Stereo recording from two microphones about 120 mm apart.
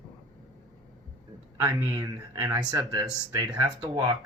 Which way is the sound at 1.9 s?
30° right (ahead or behind).